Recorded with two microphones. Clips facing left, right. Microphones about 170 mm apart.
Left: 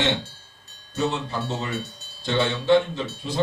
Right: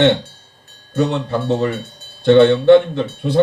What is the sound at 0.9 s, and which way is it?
Speech, 60° right (ahead or behind).